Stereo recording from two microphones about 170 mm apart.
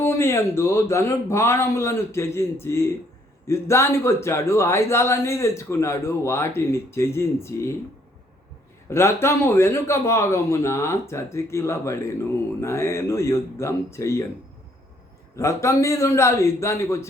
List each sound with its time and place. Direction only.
0.0 s speech: 15° left (ahead or behind)
8.9 s speech: 15° left (ahead or behind)
15.4 s speech: 15° left (ahead or behind)